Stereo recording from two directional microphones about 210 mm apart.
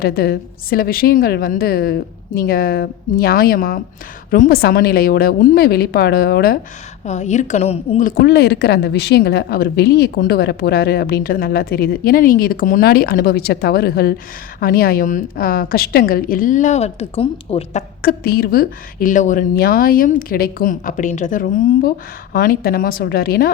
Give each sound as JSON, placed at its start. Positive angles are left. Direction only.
{"t": 0.0, "sound": "a woman's voice", "side_deg": 50}
{"t": 7.0, "sound": "a woman's voice", "side_deg": 35}
{"t": 18.0, "sound": "a woman's voice", "side_deg": 45}